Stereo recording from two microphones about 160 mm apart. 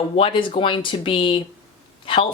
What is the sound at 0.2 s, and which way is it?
Speech, 35° left (ahead or behind).